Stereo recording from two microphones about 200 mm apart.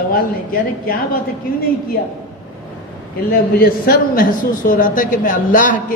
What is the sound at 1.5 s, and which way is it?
Speech, 45° left (ahead or behind).